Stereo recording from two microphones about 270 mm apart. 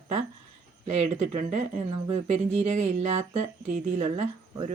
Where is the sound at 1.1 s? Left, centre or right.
Right.